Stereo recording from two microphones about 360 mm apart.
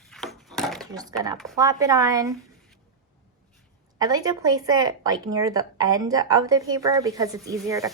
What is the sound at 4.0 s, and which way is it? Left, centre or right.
Speech, centre.